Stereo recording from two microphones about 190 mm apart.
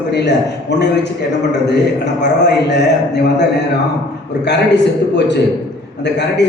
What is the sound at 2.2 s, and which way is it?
Speech, 65° left (ahead or behind).